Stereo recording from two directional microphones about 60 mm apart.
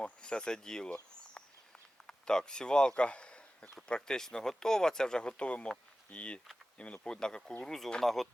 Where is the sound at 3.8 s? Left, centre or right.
Centre.